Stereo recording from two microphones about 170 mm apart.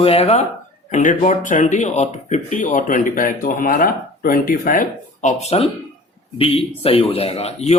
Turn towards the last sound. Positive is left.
turn(degrees=40)  # may be behind; listen again after turning